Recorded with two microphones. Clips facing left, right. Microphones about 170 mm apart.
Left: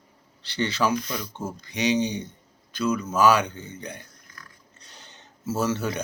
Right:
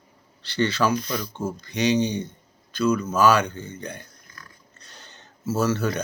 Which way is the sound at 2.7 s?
15° left (ahead or behind).